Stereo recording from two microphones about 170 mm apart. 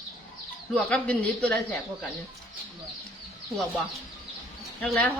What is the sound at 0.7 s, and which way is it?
Speech, 10° left (ahead or behind).